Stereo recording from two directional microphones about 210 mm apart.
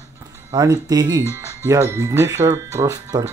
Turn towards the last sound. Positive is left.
turn(degrees=-15)  # may be behind; listen again after turning